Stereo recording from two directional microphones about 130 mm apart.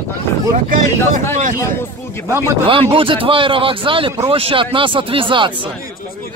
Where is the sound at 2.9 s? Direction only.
45° right (ahead or behind).